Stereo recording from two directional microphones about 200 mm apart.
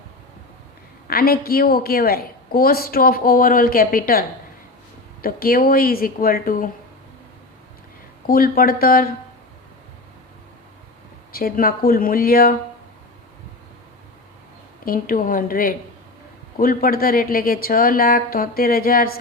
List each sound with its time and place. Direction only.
1.0 s a woman's voice: 50° left (ahead or behind)
8.3 s a woman's voice: 45° left (ahead or behind)
11.3 s a woman's voice: 50° left (ahead or behind)
14.8 s a woman's voice: 45° left (ahead or behind)